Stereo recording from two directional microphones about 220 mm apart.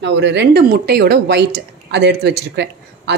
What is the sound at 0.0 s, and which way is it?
Speech, 55° right (ahead or behind).